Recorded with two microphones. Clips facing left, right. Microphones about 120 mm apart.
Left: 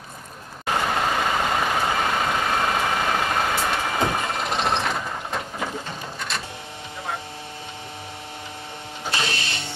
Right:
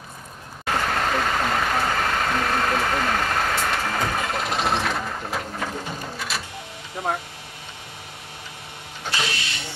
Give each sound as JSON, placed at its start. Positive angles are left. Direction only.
{"t": 0.7, "sound": "vehicle", "side_deg": 10}
{"t": 5.9, "sound": "a sound", "side_deg": -5}
{"t": 9.1, "sound": "printer", "side_deg": 30}